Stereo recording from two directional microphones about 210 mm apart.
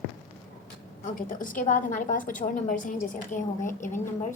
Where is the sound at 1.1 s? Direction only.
40° left (ahead or behind).